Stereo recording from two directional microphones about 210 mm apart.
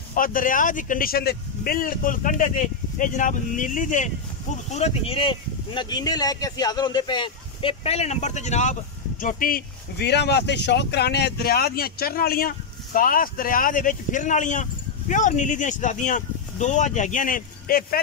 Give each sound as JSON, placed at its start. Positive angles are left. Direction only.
{"t": 0.1, "sound": "speech", "side_deg": 40}